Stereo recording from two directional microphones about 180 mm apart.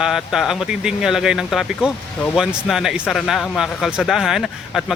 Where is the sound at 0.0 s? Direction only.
5° right (ahead or behind).